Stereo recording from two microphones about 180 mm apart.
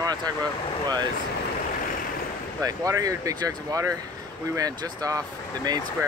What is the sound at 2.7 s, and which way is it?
Speech, 20° right (ahead or behind).